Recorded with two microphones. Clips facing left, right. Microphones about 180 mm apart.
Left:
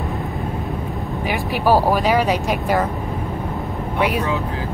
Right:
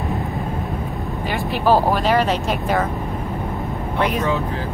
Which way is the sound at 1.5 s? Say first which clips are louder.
Even; 10° left (ahead or behind).